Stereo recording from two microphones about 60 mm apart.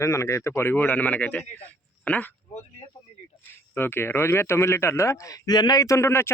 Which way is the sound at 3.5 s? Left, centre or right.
Left.